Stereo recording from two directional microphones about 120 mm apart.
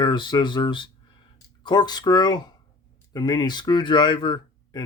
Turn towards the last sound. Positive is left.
turn(degrees=35)  # may be behind; listen again after turning